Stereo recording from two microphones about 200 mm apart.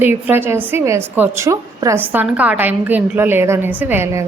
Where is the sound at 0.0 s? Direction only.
10° right (ahead or behind).